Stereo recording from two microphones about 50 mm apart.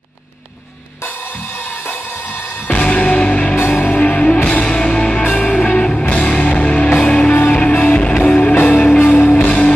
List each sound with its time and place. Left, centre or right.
2.7 s music: left